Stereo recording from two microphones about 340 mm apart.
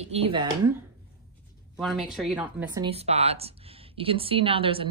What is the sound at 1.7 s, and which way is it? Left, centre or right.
Speech, centre.